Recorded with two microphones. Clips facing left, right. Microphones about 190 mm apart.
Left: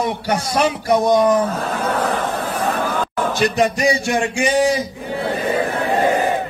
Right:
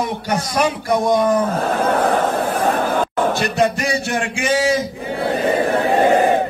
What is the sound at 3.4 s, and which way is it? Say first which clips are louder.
Music: left 1 dB; 15° left (ahead or behind).